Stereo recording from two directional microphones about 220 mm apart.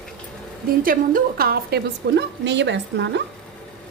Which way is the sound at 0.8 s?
40° right (ahead or behind).